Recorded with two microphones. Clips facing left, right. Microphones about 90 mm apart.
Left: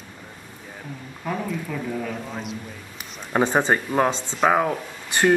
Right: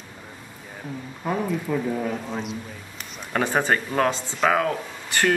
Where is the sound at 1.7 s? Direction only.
25° right (ahead or behind).